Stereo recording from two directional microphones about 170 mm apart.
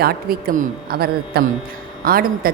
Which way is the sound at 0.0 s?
65° right (ahead or behind).